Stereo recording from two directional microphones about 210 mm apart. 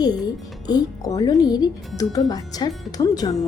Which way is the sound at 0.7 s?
20° left (ahead or behind).